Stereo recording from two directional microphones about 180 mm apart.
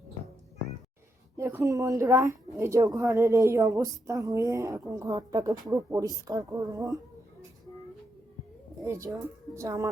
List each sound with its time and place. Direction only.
1.4 s a woman's voice: 15° right (ahead or behind)
8.8 s speech: 20° right (ahead or behind)